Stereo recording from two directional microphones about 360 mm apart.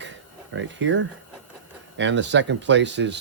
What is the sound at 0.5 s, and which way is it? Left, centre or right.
Speech, right.